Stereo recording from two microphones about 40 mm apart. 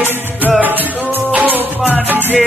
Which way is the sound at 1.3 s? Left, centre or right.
Right.